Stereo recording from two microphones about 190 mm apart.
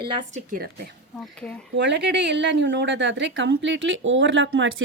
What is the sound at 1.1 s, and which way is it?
Speech, 5° left (ahead or behind).